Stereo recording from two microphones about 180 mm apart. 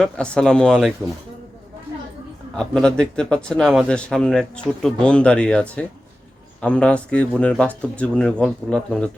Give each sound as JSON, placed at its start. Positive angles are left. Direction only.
{"t": 0.0, "sound": "speech", "side_deg": 5}
{"t": 2.6, "sound": "speech", "side_deg": 5}